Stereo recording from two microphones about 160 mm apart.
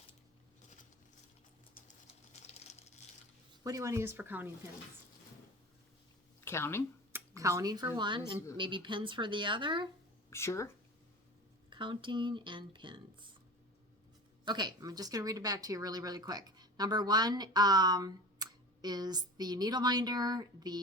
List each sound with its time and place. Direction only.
2.7 s a sound: 45° left (ahead or behind)
3.6 s speech: 20° right (ahead or behind)
6.4 s speech: 15° left (ahead or behind)
7.1 s speech: 20° right (ahead or behind)
10.2 s speech: 15° left (ahead or behind)
11.7 s speech: 30° right (ahead or behind)
14.4 s speech: 25° right (ahead or behind)